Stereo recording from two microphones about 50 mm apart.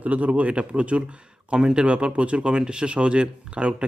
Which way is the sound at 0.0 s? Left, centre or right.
Right.